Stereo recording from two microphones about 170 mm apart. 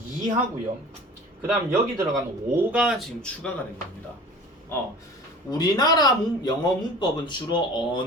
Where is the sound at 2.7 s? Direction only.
5° right (ahead or behind).